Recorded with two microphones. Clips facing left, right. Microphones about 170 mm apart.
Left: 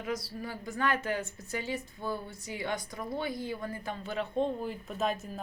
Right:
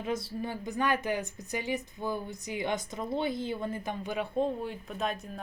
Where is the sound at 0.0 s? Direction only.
25° right (ahead or behind).